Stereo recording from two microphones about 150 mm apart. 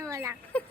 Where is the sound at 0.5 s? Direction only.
10° left (ahead or behind).